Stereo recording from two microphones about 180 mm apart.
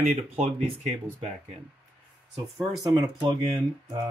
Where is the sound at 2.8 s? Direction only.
20° right (ahead or behind).